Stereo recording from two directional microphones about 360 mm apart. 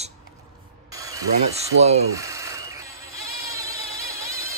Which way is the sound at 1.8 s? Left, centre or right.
Centre.